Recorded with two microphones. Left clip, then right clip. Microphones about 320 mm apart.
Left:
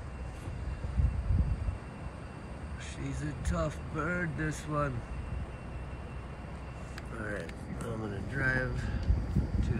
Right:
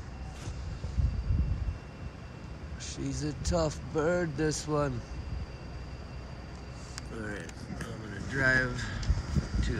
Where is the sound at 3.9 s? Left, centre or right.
Centre.